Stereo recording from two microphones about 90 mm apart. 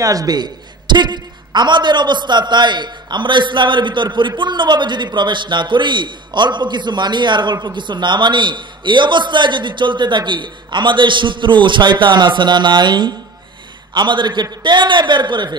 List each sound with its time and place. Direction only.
0.0 s a man's voice: 40° right (ahead or behind); by 15.5 s 55° right (ahead or behind)